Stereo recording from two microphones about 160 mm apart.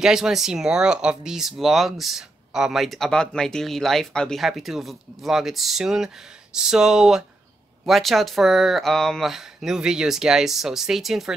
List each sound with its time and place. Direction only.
0.0 s speech: 5° right (ahead or behind)